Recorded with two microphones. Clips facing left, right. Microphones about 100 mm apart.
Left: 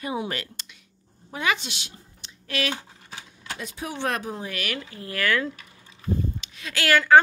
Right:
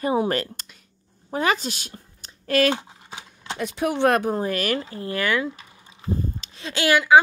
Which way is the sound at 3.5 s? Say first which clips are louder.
Right 10 dB; 65° right (ahead or behind).